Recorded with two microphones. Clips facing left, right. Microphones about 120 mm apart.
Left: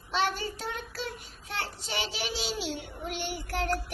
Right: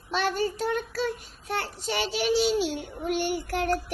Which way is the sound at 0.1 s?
45° right (ahead or behind).